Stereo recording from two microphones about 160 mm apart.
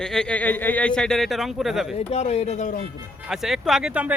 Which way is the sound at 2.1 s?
40° left (ahead or behind).